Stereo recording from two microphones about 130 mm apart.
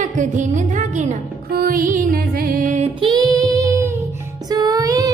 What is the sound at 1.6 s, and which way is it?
Music, 90° right.